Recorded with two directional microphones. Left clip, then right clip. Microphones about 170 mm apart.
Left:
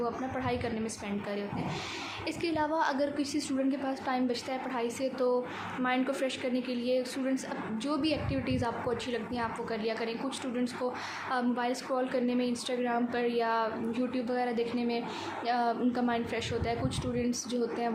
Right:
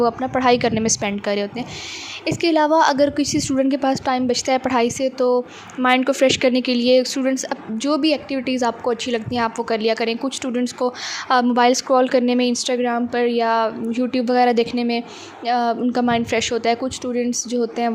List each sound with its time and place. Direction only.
0.0 s a woman's voice: 65° right (ahead or behind)